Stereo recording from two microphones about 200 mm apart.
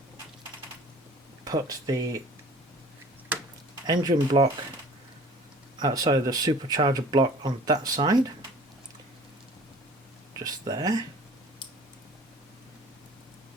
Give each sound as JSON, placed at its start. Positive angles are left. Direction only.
{"t": 1.5, "sound": "speech", "side_deg": -20}
{"t": 3.8, "sound": "speech", "side_deg": -20}
{"t": 5.8, "sound": "speech", "side_deg": -20}
{"t": 10.4, "sound": "speech", "side_deg": -20}